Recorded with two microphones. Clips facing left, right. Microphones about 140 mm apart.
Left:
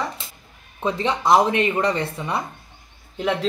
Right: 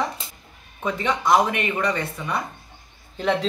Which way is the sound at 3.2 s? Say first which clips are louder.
Even; 5° left (ahead or behind).